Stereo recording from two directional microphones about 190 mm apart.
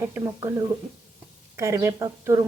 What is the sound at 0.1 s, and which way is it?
A woman's voice, 15° right (ahead or behind).